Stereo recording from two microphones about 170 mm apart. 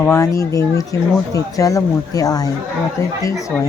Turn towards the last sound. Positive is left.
turn(degrees=20)  # may be behind; listen again after turning